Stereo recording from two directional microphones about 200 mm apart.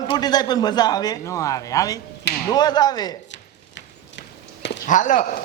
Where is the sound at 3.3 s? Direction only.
60° left (ahead or behind).